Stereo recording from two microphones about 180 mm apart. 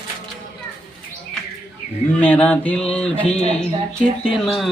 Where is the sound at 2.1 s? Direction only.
10° left (ahead or behind).